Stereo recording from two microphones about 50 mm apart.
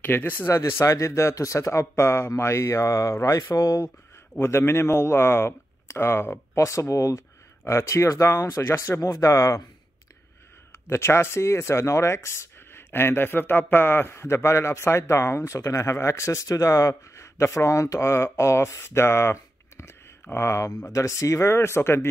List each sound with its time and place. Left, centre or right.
0.0 s speech: left
0.5 s speech: left
4.4 s speech: left
6.5 s speech: left
7.6 s speech: left
10.7 s speech: left
20.3 s speech: left
20.9 s speech: left